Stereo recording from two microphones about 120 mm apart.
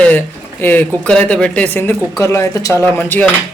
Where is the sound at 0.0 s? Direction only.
10° left (ahead or behind).